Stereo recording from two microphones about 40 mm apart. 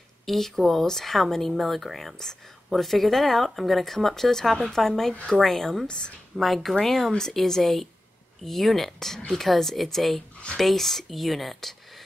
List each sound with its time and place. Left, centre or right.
0.2 s speech: centre
5.9 s speech: left
6.3 s speech: centre